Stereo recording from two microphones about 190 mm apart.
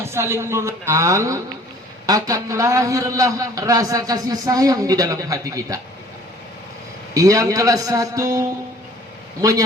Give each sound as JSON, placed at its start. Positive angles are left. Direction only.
{"t": 0.0, "sound": "a man's voice", "side_deg": -15}
{"t": 7.1, "sound": "a man's voice", "side_deg": -15}